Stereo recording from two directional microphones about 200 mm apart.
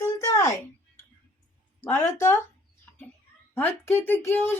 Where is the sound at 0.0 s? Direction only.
15° left (ahead or behind).